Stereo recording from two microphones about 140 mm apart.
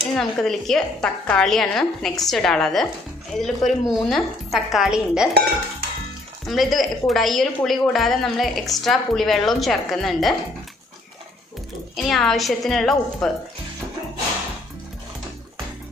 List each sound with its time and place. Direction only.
0.1 s a woman's voice: 5° left (ahead or behind)
6.4 s a woman's voice: centre (ahead or behind)
12.0 s a woman's voice: centre (ahead or behind)